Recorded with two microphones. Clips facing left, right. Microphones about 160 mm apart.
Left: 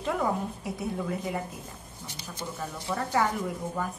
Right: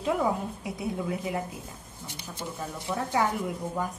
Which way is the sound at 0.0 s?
5° right (ahead or behind).